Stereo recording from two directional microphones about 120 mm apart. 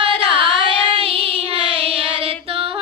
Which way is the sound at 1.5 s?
50° right (ahead or behind).